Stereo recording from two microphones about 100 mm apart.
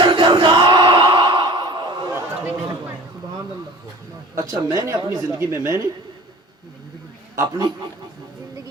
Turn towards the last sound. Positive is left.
turn(degrees=-40)  # may be behind; listen again after turning